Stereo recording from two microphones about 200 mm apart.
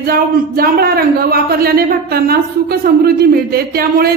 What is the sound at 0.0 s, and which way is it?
A woman's voice, 50° right (ahead or behind).